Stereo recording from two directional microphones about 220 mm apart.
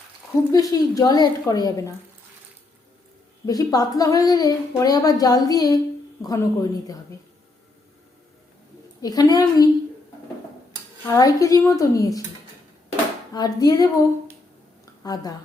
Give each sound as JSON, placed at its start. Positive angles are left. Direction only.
{"t": 0.5, "sound": "a woman's voice", "side_deg": 15}
{"t": 3.4, "sound": "a woman's voice", "side_deg": 15}
{"t": 9.0, "sound": "a woman's voice", "side_deg": 15}
{"t": 11.0, "sound": "a woman's voice", "side_deg": 15}
{"t": 13.3, "sound": "a woman's voice", "side_deg": 20}
{"t": 15.0, "sound": "a woman's voice", "side_deg": 15}